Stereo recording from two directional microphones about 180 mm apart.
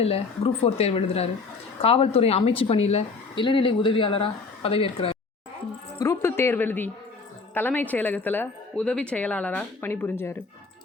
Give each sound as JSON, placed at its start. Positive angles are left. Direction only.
{"t": 0.0, "sound": "speech", "side_deg": 35}
{"t": 6.0, "sound": "music", "side_deg": 15}
{"t": 7.5, "sound": "a woman's voice", "side_deg": 10}